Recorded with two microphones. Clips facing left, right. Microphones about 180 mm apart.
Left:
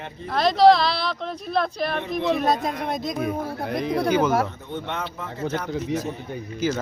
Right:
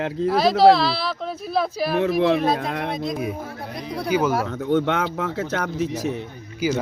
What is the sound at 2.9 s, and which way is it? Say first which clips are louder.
Speech: right 1 dB; 45° left (ahead or behind).